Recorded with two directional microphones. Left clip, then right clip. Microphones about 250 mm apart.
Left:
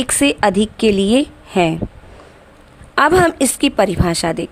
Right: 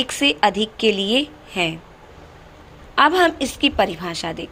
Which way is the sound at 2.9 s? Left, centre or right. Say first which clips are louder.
Left 3 dB; left.